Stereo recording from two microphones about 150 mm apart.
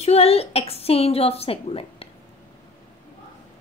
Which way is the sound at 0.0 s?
45° left (ahead or behind).